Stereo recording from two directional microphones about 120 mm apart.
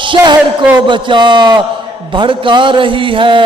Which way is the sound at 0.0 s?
40° right (ahead or behind).